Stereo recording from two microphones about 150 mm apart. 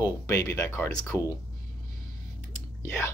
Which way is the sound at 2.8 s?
15° left (ahead or behind).